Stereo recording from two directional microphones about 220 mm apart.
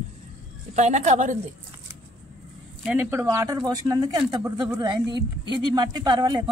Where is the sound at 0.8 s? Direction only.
30° right (ahead or behind).